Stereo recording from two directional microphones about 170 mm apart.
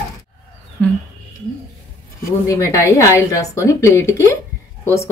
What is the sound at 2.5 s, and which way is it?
Speech, 15° left (ahead or behind).